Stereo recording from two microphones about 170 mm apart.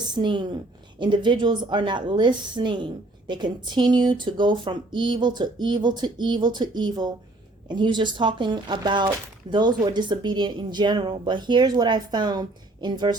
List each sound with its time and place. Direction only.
0.1 s a woman's voice: 25° right (ahead or behind)